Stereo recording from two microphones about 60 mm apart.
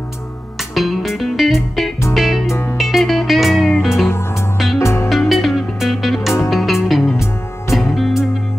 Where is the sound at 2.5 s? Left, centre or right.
Left.